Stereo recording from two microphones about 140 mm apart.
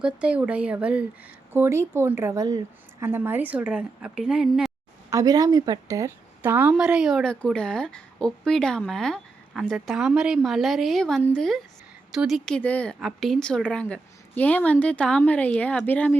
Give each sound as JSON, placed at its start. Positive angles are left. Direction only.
{"t": 0.0, "sound": "a woman's voice", "side_deg": -10}
{"t": 3.1, "sound": "a woman's voice", "side_deg": -15}
{"t": 5.1, "sound": "a woman's voice", "side_deg": -25}
{"t": 12.5, "sound": "a woman's voice", "side_deg": 10}